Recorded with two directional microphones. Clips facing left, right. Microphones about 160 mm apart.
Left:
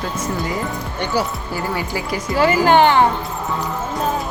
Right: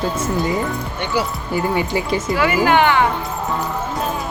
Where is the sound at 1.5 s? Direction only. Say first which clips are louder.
Right 5 dB; 20° right (ahead or behind).